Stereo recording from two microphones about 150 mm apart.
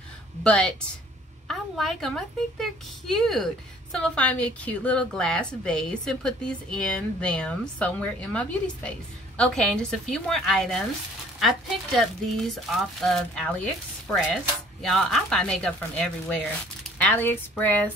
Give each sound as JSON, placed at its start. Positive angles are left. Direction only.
{"t": 0.4, "sound": "a woman's voice", "side_deg": 5}